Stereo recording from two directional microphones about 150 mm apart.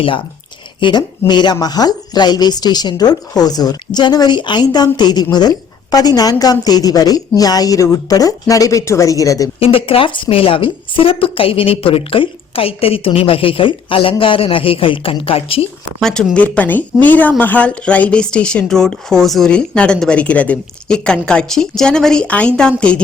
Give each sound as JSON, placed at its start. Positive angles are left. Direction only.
{"t": 0.8, "sound": "speech", "side_deg": 30}
{"t": 9.6, "sound": "a woman's voice", "side_deg": 40}
{"t": 16.0, "sound": "speech", "side_deg": 0}